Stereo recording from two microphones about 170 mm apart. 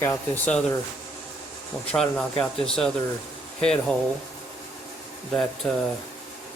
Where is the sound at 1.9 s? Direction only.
5° left (ahead or behind).